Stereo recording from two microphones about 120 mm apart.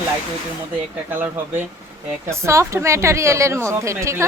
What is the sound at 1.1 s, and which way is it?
A woman's voice, 15° right (ahead or behind).